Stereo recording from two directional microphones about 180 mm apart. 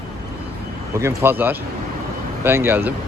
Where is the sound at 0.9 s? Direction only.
15° right (ahead or behind).